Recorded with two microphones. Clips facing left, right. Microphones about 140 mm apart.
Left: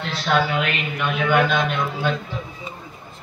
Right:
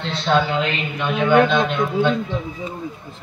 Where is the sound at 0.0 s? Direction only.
25° right (ahead or behind).